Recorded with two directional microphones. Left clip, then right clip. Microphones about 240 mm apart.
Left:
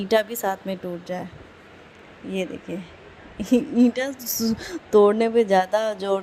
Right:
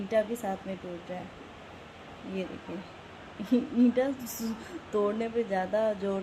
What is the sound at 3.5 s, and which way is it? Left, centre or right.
A woman's voice, left.